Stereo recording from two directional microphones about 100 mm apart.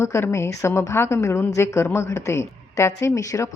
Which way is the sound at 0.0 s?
30° left (ahead or behind).